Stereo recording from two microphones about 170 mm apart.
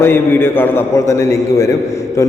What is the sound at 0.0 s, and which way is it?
A man's voice, 15° left (ahead or behind).